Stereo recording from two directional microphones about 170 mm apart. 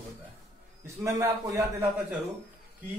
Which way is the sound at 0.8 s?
15° right (ahead or behind).